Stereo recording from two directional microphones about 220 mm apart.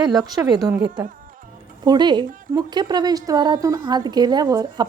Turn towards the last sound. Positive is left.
turn(degrees=-20)  # may be behind; listen again after turning